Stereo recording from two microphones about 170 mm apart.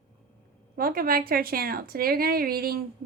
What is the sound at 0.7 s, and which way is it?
A woman's voice, 60° right (ahead or behind).